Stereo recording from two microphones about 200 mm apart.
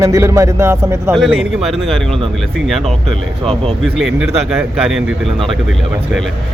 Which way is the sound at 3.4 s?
30° right (ahead or behind).